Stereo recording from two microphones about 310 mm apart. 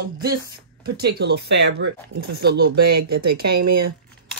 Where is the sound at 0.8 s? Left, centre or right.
Right.